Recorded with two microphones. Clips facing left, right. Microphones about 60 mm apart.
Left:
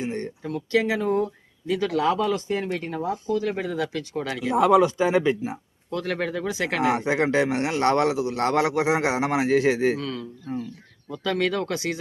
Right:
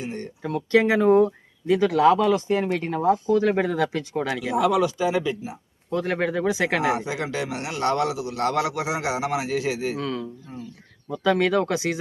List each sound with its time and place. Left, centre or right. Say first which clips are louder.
0.0 s a sound: left 3 dB; left
0.4 s speech: right 4 dB; right
1.6 s speech: right 5 dB; right
4.5 s a man's voice: left 4 dB; left
5.9 s speech: right 3 dB; right
6.9 s a man's voice: left 5 dB; left
10.0 s speech: right 3 dB; right